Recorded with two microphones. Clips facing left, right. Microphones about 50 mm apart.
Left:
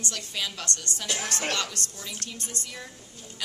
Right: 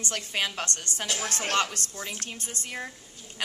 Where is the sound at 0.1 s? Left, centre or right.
Right.